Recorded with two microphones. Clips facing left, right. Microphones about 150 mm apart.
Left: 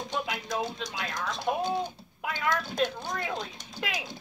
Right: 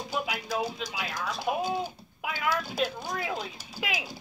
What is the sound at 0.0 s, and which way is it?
Speech, 5° right (ahead or behind).